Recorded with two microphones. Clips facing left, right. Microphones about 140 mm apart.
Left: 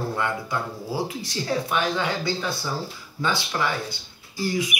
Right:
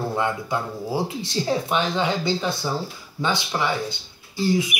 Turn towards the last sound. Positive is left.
turn(degrees=-25)  # may be behind; listen again after turning